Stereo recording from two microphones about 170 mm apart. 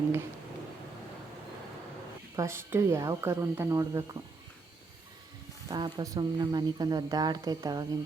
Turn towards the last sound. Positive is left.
turn(degrees=-20)  # may be behind; listen again after turning